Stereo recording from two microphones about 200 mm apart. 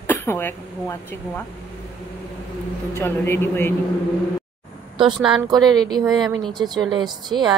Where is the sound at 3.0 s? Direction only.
10° left (ahead or behind).